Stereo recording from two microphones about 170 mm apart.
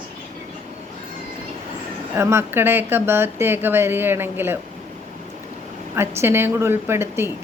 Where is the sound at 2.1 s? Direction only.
15° right (ahead or behind).